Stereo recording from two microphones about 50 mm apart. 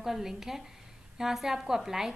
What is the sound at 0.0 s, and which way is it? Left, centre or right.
A woman's voice, centre.